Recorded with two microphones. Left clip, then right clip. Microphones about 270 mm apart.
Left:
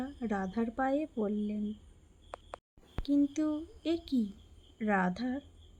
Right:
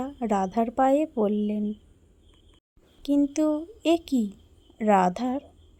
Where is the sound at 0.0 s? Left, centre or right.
Right.